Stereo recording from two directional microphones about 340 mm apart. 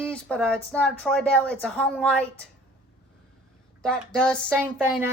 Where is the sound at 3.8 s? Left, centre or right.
Centre.